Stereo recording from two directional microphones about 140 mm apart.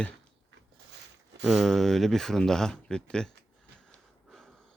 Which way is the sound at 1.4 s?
5° right (ahead or behind).